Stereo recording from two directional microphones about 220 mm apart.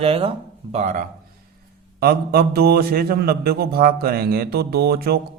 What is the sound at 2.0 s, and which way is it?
Speech, 45° right (ahead or behind).